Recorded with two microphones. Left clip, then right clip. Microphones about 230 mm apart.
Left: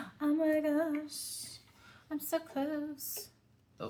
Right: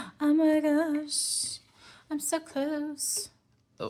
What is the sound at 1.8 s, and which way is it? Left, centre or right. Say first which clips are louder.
Speech: right 6 dB; right.